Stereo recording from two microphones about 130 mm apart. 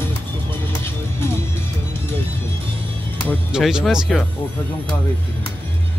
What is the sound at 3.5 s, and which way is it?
Speech, 5° right (ahead or behind).